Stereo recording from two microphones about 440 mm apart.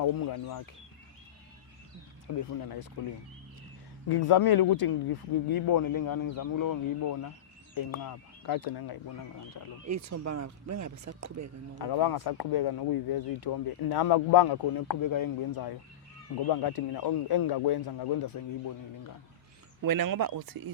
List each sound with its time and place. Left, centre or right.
0.0 s speech: left
2.2 s speech: left
4.1 s speech: left
9.8 s speech: right
11.8 s speech: left
14.8 s speech: left
19.8 s speech: right